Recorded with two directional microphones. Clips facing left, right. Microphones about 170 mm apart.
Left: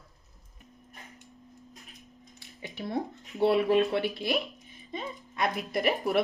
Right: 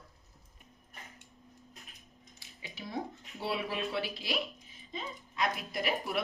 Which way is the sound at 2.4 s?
55° left (ahead or behind).